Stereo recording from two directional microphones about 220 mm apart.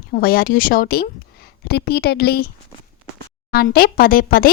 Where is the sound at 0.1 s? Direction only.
40° left (ahead or behind).